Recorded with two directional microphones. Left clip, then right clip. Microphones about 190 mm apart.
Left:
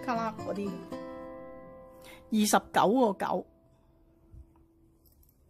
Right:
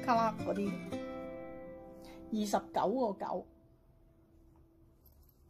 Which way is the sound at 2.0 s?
25° left (ahead or behind).